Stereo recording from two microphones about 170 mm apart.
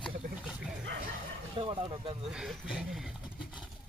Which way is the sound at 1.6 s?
30° right (ahead or behind).